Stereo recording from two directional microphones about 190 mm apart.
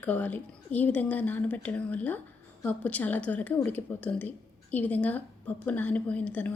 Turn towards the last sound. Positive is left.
turn(degrees=5)  # may be behind; listen again after turning